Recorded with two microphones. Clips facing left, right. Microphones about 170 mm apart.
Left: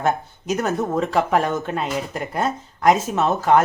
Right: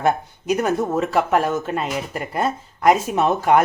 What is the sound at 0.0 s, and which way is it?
Speech, 10° right (ahead or behind).